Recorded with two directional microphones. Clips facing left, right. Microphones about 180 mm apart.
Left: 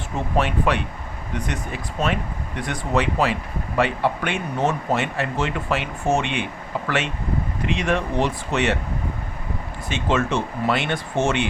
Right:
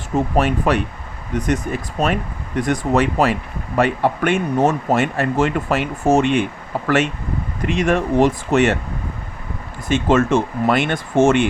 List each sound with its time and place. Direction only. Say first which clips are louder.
0.3 s speech: right 2 dB; 45° right (ahead or behind)
9.9 s speech: right 7 dB; 50° right (ahead or behind)